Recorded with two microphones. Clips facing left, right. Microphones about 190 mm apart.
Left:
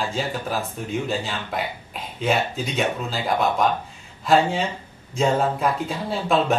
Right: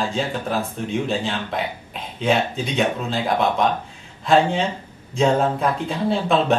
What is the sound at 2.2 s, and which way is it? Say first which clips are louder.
Speech: right 2 dB; centre (ahead or behind).